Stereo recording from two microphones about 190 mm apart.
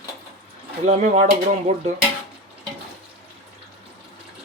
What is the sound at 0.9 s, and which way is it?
Speech, 35° right (ahead or behind).